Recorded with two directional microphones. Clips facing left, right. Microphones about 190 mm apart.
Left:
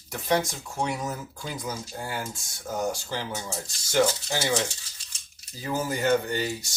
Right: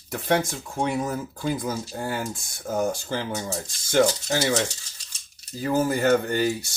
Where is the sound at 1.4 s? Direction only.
55° right (ahead or behind).